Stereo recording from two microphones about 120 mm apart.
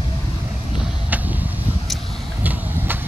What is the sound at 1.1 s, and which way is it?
Vehicle, 15° right (ahead or behind).